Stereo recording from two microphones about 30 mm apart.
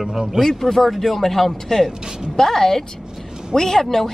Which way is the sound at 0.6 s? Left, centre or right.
Centre.